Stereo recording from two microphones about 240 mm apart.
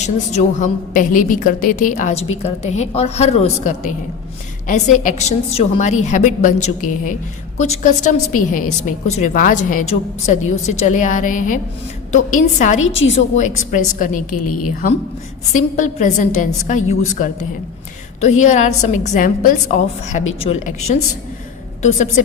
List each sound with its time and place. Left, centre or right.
0.0 s a woman's voice: left
12.8 s a woman's voice: left
13.1 s a woman's voice: left
14.3 s a woman's voice: left
15.5 s a woman's voice: left